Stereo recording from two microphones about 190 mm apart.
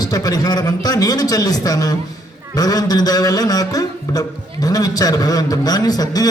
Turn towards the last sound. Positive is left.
turn(degrees=20)  # may be behind; listen again after turning